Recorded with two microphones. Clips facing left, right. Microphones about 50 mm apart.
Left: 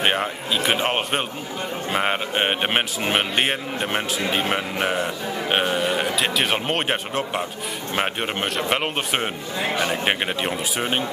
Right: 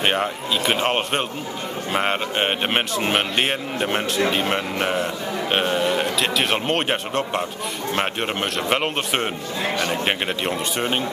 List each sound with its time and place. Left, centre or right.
0.0 s a man's voice: centre